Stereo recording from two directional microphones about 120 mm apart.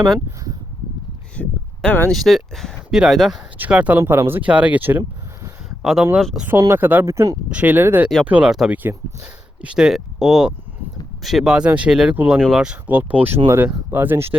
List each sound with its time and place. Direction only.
1.4 s speech: 10° left (ahead or behind); by 5.0 s 15° right (ahead or behind)
5.8 s speech: centre (ahead or behind)
6.6 s speech: 20° right (ahead or behind)
7.5 s speech: 15° right (ahead or behind)
8.7 s speech: 15° right (ahead or behind); by 12.7 s centre (ahead or behind)
12.9 s speech: 15° right (ahead or behind)